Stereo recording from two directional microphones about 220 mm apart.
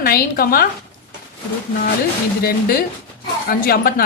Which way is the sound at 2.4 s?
45° left (ahead or behind).